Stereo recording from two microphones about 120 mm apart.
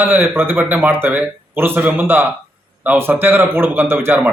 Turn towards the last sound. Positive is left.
turn(degrees=-20)  # may be behind; listen again after turning